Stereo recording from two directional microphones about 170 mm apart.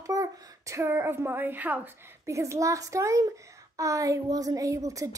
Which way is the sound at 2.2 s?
15° right (ahead or behind).